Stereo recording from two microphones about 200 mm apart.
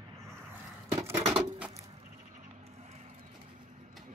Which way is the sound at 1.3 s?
5° right (ahead or behind).